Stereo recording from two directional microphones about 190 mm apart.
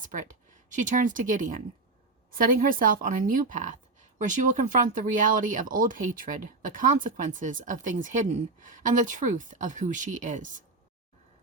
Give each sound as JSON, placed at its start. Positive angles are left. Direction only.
{"t": 0.0, "sound": "speech", "side_deg": -40}